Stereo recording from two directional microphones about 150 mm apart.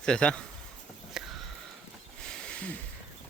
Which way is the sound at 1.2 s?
5° right (ahead or behind).